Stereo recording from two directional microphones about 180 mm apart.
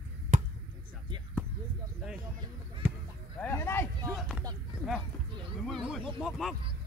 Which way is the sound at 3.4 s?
15° left (ahead or behind).